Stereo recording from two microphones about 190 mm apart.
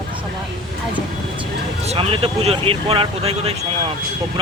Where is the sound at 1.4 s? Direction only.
30° right (ahead or behind).